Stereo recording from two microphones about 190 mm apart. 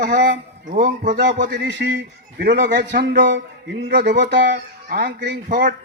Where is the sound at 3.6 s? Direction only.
65° right (ahead or behind).